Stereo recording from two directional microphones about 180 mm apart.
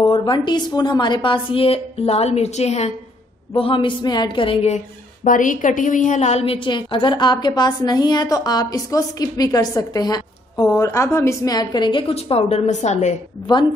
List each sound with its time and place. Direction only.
0.0 s a woman's voice: 25° left (ahead or behind); by 13.1 s 40° left (ahead or behind)